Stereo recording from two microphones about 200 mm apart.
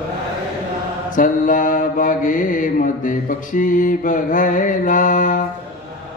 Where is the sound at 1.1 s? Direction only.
40° left (ahead or behind).